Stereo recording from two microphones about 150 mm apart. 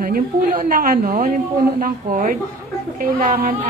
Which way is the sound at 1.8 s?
70° right (ahead or behind).